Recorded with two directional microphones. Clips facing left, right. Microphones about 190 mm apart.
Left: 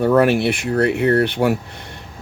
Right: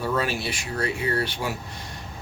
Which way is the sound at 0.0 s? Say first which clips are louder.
Left 12 dB; 60° left (ahead or behind).